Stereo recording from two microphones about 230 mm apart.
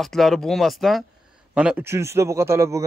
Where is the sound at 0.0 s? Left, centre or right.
Centre.